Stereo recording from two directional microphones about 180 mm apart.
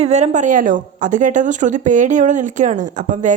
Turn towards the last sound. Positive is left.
turn(degrees=-45)  # may be behind; listen again after turning